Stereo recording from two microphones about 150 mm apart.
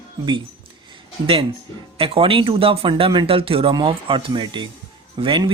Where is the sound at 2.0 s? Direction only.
40° right (ahead or behind).